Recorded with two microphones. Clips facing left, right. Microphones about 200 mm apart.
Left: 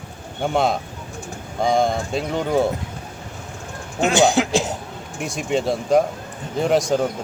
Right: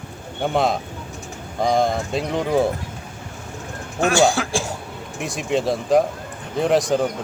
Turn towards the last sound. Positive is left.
turn(degrees=0)  # may be behind; listen again after turning